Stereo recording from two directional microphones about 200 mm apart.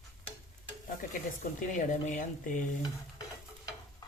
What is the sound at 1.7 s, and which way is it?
Speech, 40° left (ahead or behind).